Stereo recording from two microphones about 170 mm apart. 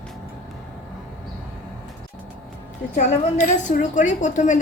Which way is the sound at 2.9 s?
45° left (ahead or behind).